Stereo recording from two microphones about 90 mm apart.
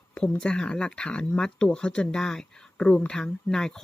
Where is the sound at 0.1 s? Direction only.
10° left (ahead or behind).